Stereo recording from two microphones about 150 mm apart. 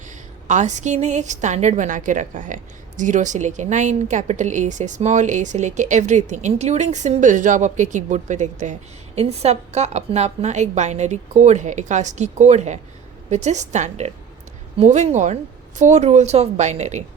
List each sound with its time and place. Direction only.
0.4 s a woman's voice: 55° right (ahead or behind)